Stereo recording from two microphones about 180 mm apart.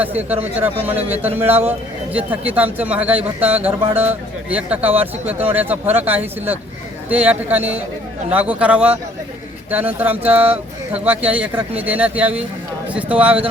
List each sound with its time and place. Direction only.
0.0 s a man's voice: 10° right (ahead or behind)
0.9 s a man's voice: 35° right (ahead or behind)
1.1 s a man's voice: 10° right (ahead or behind)
2.7 s a man's voice: 10° right (ahead or behind)